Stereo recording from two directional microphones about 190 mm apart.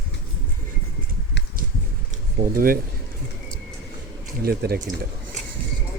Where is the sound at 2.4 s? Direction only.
50° right (ahead or behind).